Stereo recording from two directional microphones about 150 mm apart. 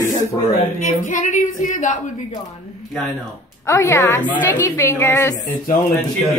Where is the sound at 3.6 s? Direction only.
20° left (ahead or behind).